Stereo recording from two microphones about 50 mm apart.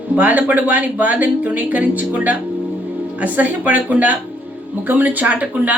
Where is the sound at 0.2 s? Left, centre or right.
Right.